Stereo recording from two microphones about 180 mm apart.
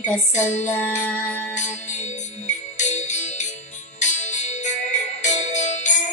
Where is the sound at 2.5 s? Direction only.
40° left (ahead or behind).